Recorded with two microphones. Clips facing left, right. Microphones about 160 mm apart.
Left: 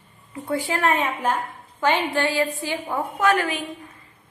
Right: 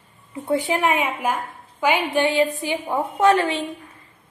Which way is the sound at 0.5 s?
20° right (ahead or behind).